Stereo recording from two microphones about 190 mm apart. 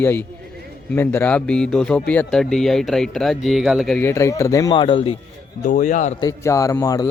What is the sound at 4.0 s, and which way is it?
Speech, 15° left (ahead or behind).